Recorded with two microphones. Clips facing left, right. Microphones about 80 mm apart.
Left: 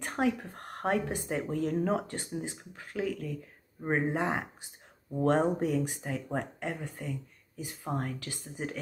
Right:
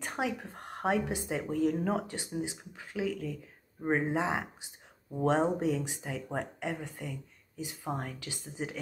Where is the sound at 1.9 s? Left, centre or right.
Centre.